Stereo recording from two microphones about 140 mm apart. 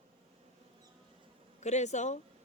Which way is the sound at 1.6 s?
55° left (ahead or behind).